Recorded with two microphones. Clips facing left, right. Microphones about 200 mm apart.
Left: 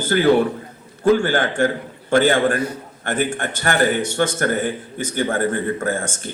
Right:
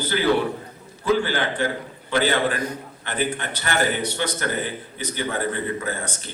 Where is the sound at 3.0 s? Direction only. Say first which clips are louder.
Left 4 dB; 50° left (ahead or behind).